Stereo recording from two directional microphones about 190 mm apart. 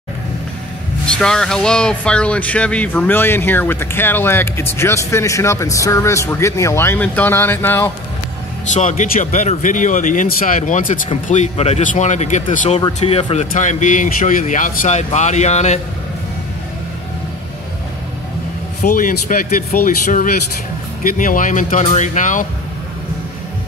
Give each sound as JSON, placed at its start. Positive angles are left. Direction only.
{"t": 1.0, "sound": "speech", "side_deg": 5}
{"t": 8.6, "sound": "speech", "side_deg": 40}
{"t": 18.8, "sound": "speech", "side_deg": 45}